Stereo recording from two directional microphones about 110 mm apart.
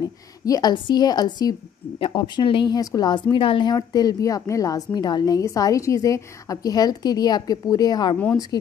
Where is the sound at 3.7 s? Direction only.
35° left (ahead or behind).